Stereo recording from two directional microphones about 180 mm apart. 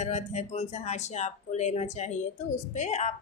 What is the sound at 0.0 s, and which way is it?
Speech, 40° left (ahead or behind).